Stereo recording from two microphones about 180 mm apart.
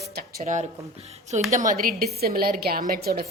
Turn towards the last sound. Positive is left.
turn(degrees=-60)  # may be behind; listen again after turning